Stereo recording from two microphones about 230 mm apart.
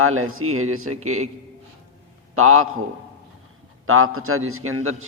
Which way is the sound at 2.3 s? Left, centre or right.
Right.